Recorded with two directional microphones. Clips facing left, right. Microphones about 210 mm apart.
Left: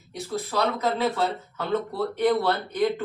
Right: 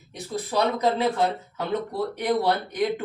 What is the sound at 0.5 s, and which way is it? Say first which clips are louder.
Speech: right 3 dB; 15° right (ahead or behind).